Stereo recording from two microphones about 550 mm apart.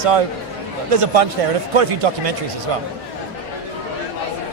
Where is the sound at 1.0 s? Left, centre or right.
Right.